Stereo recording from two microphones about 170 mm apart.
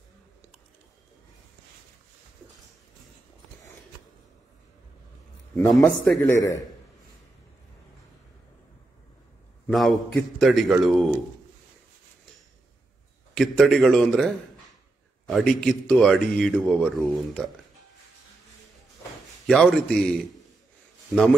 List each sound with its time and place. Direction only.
6.0 s a man's voice: 15° left (ahead or behind)
9.7 s speech: 5° left (ahead or behind)
13.3 s speech: 5° left (ahead or behind)
19.4 s speech: centre (ahead or behind)